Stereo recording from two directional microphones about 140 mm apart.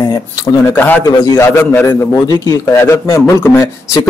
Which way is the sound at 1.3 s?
20° left (ahead or behind).